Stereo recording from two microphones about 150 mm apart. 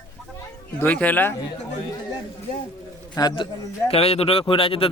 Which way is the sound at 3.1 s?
30° left (ahead or behind).